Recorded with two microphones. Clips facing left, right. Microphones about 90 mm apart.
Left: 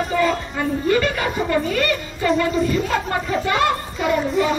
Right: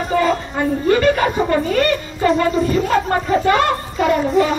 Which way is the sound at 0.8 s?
40° right (ahead or behind).